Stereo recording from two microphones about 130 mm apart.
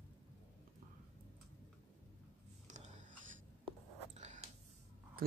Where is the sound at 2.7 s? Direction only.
80° right.